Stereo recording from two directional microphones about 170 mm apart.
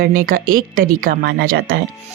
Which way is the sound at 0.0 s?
55° right (ahead or behind).